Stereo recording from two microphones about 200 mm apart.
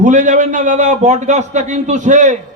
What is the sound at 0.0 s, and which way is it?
A man's voice, 40° right (ahead or behind).